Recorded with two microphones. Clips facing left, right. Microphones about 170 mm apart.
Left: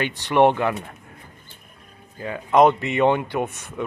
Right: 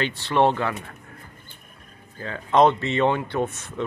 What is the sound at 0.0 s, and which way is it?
Speech, 15° left (ahead or behind).